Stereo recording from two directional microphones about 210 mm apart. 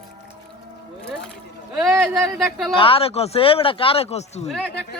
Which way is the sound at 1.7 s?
Centre (ahead or behind).